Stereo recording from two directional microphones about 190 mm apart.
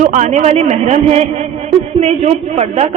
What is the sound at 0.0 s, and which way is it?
A man's voice, 40° right (ahead or behind).